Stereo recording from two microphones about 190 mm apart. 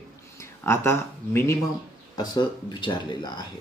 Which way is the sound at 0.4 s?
15° left (ahead or behind).